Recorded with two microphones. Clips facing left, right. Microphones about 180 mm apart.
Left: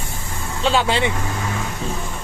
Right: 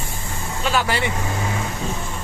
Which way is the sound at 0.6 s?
25° left (ahead or behind).